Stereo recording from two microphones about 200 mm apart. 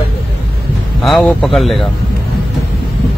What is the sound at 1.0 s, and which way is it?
Speech, centre (ahead or behind).